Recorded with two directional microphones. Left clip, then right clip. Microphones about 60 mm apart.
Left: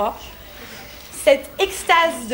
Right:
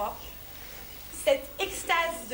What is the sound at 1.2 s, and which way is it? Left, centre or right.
Speech, right.